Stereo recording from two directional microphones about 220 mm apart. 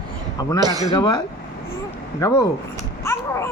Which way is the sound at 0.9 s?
20° left (ahead or behind).